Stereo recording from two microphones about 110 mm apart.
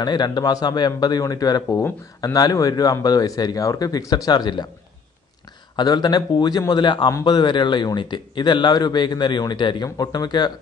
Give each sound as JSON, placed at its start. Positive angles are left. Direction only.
{"t": 0.0, "sound": "speech", "side_deg": 40}
{"t": 5.8, "sound": "speech", "side_deg": 40}